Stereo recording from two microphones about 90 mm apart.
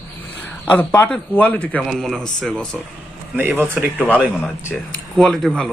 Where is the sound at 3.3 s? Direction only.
20° right (ahead or behind).